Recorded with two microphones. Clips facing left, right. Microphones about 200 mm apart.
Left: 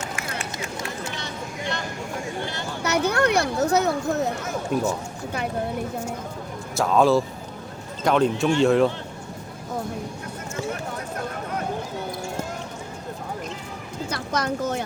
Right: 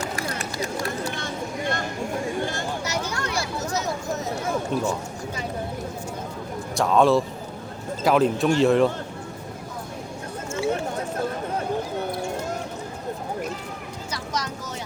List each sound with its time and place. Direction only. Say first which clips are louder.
0.2 s run: right 3 dB; 35° right (ahead or behind)
1.1 s a sound: right 3 dB; 50° right (ahead or behind)
2.8 s speech: left 8 dB; 60° left (ahead or behind)
4.7 s speech: left 4 dB; 10° left (ahead or behind)
6.7 s speech: even; centre (ahead or behind)
14.1 s a sound: left 5 dB; 55° left (ahead or behind)